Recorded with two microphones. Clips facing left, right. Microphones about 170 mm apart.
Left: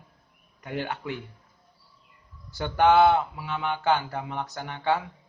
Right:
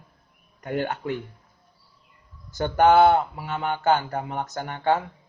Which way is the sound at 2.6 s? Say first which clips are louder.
Right 3 dB; 45° right (ahead or behind).